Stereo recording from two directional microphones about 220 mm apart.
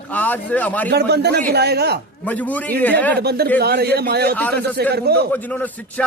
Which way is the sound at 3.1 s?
45° right (ahead or behind).